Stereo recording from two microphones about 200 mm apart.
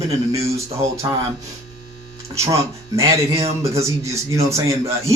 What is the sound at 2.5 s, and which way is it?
A man's voice, 15° right (ahead or behind).